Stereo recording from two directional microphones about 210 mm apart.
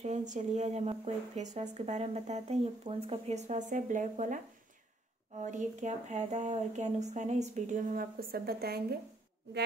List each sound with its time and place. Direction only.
0.0 s speech: 35° right (ahead or behind)
5.4 s speech: 35° right (ahead or behind)